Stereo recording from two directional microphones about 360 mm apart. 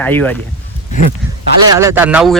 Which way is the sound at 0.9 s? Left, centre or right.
Left.